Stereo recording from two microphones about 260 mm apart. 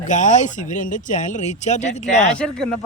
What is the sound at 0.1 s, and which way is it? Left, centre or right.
Speech, left.